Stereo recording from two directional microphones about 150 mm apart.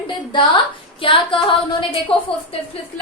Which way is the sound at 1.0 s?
35° left (ahead or behind).